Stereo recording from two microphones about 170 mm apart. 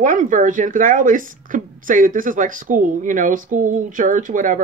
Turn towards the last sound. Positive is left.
turn(degrees=-50)  # may be behind; listen again after turning